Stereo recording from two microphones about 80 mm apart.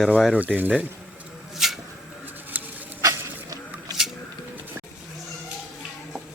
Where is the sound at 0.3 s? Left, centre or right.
Centre.